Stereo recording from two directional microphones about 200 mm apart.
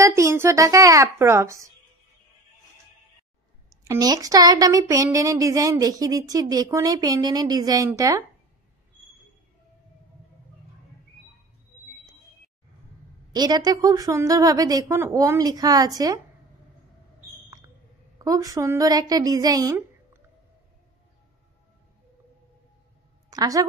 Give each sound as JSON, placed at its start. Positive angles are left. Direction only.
{"t": 0.0, "sound": "speech", "side_deg": -15}
{"t": 3.8, "sound": "speech", "side_deg": -15}
{"t": 13.3, "sound": "speech", "side_deg": -20}
{"t": 18.2, "sound": "speech", "side_deg": -15}
{"t": 23.3, "sound": "speech", "side_deg": -15}